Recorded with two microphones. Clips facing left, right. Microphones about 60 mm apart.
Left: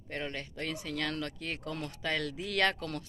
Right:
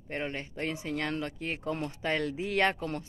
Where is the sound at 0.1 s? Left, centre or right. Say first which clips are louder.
Right 3 dB; right.